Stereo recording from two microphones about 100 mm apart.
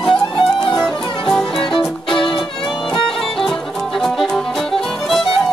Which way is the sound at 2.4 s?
Centre (ahead or behind).